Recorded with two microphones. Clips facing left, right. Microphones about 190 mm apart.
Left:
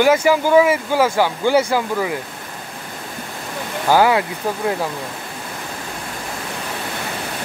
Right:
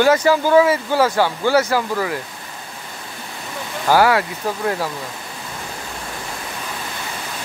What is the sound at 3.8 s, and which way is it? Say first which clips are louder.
Speech: even; 15° left (ahead or behind).